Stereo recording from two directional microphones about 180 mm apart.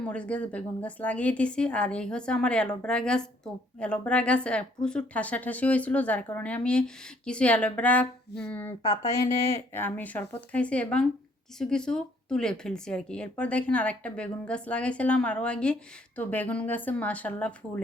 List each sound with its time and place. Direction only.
0.0 s a woman's voice: 5° left (ahead or behind)